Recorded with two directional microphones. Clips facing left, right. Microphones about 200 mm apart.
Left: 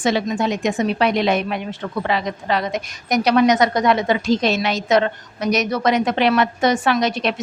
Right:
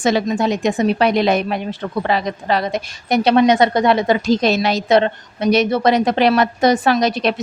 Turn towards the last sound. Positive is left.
turn(degrees=-35)  # may be behind; listen again after turning